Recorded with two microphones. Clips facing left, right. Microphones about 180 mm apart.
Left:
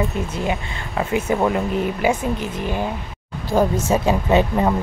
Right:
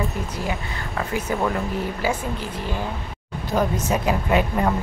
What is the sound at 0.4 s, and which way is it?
Speech, 20° left (ahead or behind).